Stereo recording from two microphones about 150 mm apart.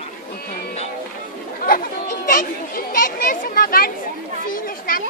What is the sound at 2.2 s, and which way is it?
A child's voice, 70° left (ahead or behind).